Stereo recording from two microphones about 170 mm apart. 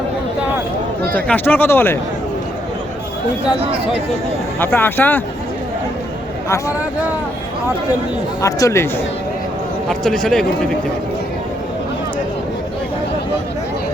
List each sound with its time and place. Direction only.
1.1 s speech: 10° left (ahead or behind)
4.6 s speech: 10° left (ahead or behind)
8.4 s speech: 20° left (ahead or behind)
9.9 s a man's voice: 5° left (ahead or behind)